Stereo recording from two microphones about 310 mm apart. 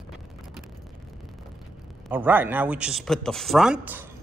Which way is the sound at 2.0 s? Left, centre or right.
Centre.